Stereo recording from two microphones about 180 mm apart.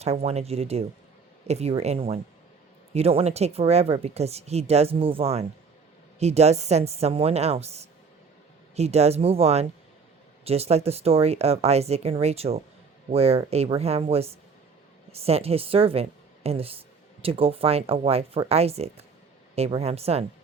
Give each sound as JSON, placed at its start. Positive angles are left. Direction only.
{"t": 0.0, "sound": "speech", "side_deg": -35}